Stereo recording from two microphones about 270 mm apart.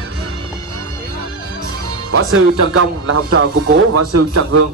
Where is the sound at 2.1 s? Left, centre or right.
Right.